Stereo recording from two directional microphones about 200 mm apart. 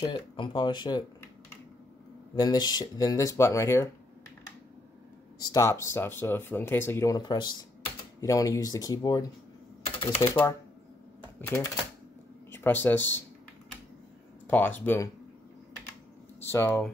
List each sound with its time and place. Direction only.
0.0 s speech: 25° left (ahead or behind)
2.3 s speech: 20° left (ahead or behind)
5.4 s speech: 15° left (ahead or behind)
14.5 s speech: 10° left (ahead or behind)
16.3 s speech: 10° left (ahead or behind)